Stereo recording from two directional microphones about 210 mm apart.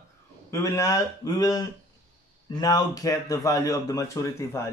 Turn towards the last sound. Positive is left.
turn(degrees=15)  # may be behind; listen again after turning